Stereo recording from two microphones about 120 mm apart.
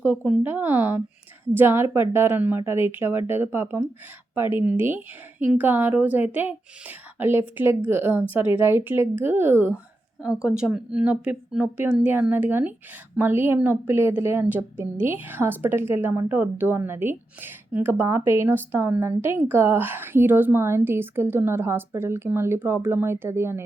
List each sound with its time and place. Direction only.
0.0 s a woman's voice: 10° right (ahead or behind)
10.2 s a woman's voice: 5° right (ahead or behind)